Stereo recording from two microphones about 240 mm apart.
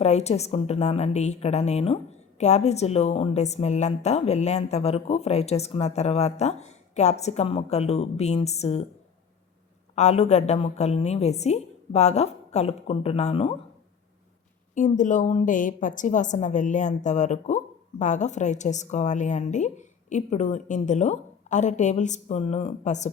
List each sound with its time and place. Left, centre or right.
0.0 s a woman's voice: left
9.9 s a woman's voice: left
14.8 s a woman's voice: left